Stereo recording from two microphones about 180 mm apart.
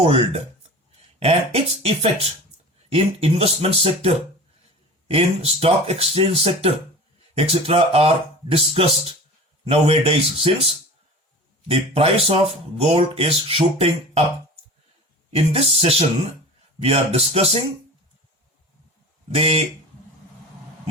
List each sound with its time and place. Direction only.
0.0 s speech: 35° right (ahead or behind)
11.7 s speech: 30° right (ahead or behind)
15.4 s speech: 35° right (ahead or behind)
19.3 s speech: 35° right (ahead or behind)